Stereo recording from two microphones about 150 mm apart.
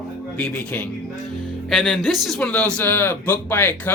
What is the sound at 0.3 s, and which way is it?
Speech, 5° left (ahead or behind).